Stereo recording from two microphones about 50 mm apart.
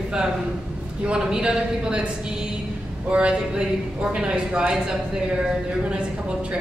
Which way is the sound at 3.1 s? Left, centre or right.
Centre.